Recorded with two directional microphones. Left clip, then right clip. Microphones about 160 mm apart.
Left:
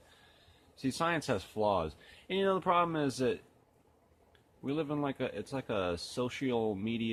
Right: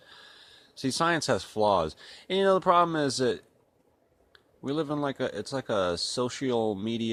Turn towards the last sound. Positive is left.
turn(degrees=-40)  # may be behind; listen again after turning